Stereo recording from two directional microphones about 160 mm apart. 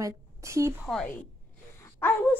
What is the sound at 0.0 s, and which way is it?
Speech, 20° right (ahead or behind).